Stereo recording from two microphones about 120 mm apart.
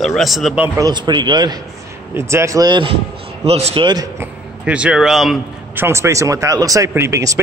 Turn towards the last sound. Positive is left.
turn(degrees=-25)  # may be behind; listen again after turning